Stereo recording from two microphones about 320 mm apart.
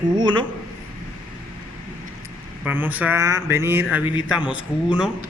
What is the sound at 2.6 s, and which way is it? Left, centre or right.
Speech, centre.